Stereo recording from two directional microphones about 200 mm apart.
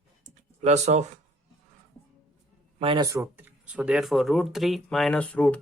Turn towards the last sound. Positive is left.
turn(degrees=5)  # may be behind; listen again after turning